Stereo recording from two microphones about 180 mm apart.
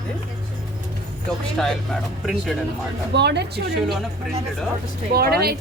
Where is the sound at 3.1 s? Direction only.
70° right (ahead or behind).